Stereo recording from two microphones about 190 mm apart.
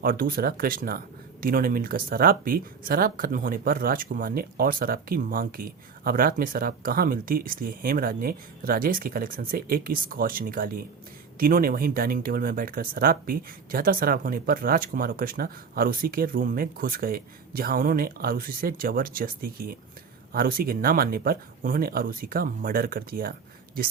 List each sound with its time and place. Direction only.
0.0 s speech: 50° right (ahead or behind)